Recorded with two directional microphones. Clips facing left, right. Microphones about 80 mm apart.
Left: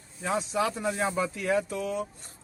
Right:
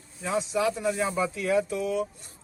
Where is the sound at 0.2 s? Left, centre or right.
Left.